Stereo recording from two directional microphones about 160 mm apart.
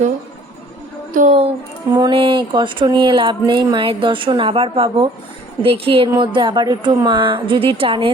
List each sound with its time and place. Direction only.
1.1 s a woman's voice: 45° right (ahead or behind)
1.9 s speech: 30° right (ahead or behind)